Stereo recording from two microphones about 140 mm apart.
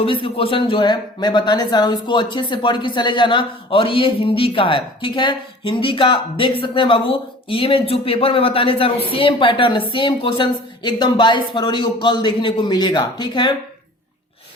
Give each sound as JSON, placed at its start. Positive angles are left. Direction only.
{"t": 0.0, "sound": "speech", "side_deg": 40}